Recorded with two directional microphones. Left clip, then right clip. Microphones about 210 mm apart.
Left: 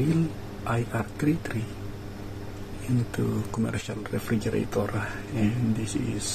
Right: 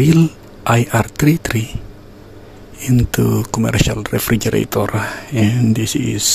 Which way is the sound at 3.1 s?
50° right (ahead or behind).